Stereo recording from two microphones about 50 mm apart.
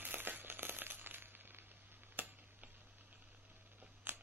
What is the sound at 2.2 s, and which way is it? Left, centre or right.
Tick-tock, right.